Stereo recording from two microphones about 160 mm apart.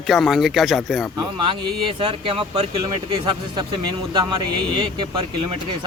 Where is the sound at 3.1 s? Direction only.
25° right (ahead or behind).